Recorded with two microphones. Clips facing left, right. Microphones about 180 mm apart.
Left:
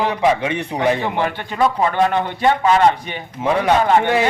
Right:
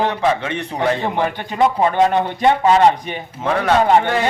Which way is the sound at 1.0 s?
20° right (ahead or behind).